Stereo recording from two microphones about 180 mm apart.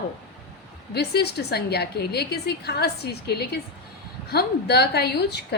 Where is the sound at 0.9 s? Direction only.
65° left (ahead or behind).